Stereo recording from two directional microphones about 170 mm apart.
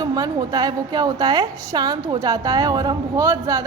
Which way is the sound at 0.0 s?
25° right (ahead or behind).